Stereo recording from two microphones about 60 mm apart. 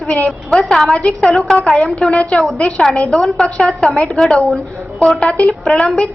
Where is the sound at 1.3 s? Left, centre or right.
Centre.